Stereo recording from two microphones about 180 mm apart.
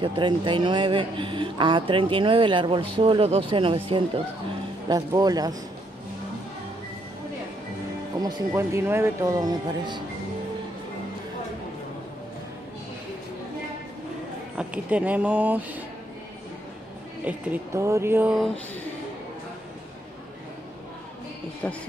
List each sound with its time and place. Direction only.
0.0 s speech: 25° right (ahead or behind)
8.2 s speech: 20° right (ahead or behind)
14.6 s speech: 5° right (ahead or behind)
17.2 s speech: 10° right (ahead or behind)
21.6 s speech: 5° left (ahead or behind)